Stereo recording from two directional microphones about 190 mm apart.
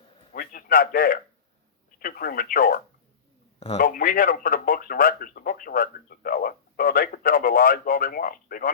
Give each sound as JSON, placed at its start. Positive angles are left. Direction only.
{"t": 0.3, "sound": "speech", "side_deg": 50}